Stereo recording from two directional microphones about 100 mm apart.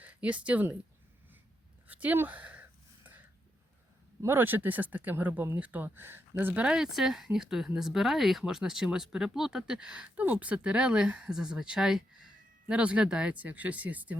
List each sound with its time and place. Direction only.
0.0 s speech: 15° right (ahead or behind)
1.9 s a sound: 15° right (ahead or behind)
4.2 s speech: 20° right (ahead or behind)